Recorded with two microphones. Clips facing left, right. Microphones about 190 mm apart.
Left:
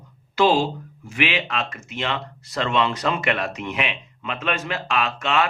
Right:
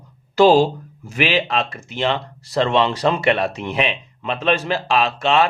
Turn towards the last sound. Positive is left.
turn(degrees=-30)  # may be behind; listen again after turning